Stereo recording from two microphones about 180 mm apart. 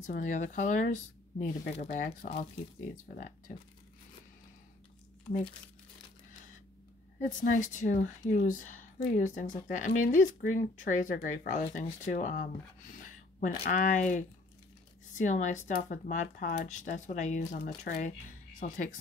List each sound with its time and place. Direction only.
0.0 s speech: 45° left (ahead or behind)
7.2 s speech: 45° left (ahead or behind)